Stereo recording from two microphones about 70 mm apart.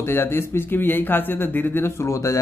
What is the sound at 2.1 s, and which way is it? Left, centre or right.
Speech, left.